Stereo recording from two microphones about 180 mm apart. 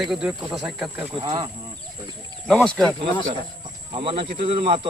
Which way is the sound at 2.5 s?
5° left (ahead or behind).